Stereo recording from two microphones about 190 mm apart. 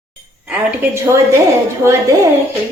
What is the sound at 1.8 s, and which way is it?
Speech, 15° right (ahead or behind).